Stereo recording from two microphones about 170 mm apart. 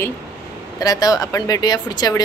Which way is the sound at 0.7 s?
20° left (ahead or behind).